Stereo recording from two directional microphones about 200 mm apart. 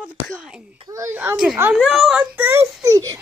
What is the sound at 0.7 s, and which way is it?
A child's voice, 20° right (ahead or behind).